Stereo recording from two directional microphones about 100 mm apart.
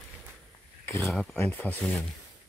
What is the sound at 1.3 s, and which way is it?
Speech, 20° left (ahead or behind).